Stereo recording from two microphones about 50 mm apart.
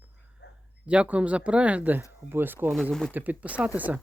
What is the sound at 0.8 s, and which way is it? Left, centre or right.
Speech, right.